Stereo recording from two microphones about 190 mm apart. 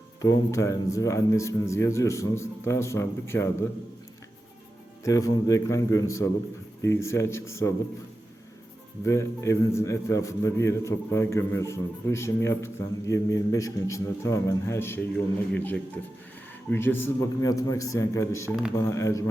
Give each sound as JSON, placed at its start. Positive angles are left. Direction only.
{"t": 0.2, "sound": "a man's voice", "side_deg": 15}
{"t": 5.0, "sound": "a man's voice", "side_deg": 15}
{"t": 9.0, "sound": "a man's voice", "side_deg": 15}